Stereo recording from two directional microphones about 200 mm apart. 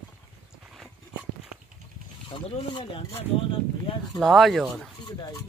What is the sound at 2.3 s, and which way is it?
Speech, 25° left (ahead or behind).